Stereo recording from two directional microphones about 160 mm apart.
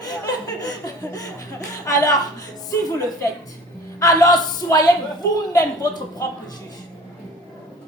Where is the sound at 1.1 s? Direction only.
20° left (ahead or behind).